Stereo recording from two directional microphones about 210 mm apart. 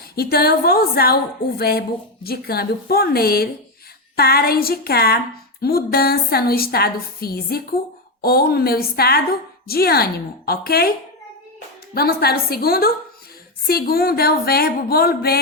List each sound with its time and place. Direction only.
0.2 s a woman's voice: 45° left (ahead or behind)
11.9 s a woman's voice: 45° left (ahead or behind)